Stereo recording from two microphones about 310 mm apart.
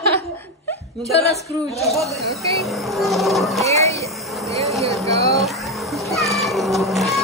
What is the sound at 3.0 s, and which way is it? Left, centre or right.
Speech, centre.